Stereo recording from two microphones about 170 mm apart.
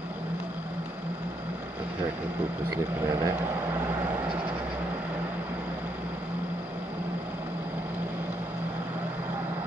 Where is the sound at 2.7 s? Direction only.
20° right (ahead or behind).